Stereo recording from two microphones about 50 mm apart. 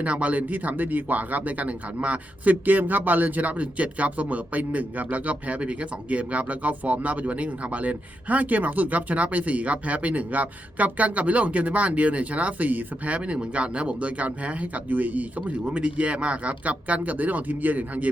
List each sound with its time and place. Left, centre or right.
0.0 s speech: right